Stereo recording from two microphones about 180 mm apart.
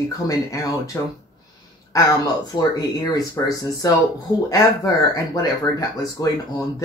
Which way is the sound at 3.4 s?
15° left (ahead or behind).